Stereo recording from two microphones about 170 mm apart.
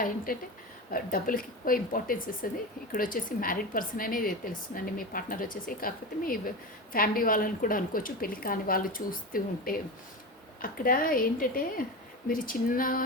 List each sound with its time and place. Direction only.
0.3 s speech: 55° left (ahead or behind)